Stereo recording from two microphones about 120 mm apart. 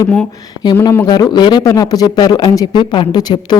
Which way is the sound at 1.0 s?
35° left (ahead or behind).